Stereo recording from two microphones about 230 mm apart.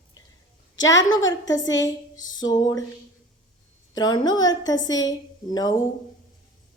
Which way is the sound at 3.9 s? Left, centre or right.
Centre.